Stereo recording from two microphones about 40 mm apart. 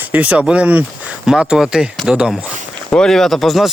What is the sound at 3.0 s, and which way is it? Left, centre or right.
Speech, centre.